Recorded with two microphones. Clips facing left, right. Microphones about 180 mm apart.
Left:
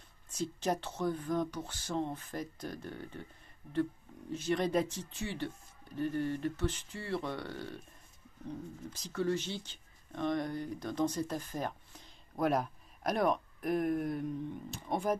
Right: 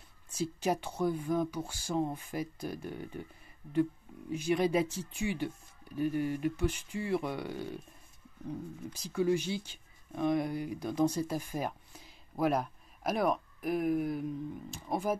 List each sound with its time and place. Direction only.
0.3 s speech: 10° right (ahead or behind)
4.3 s speech: 10° right (ahead or behind)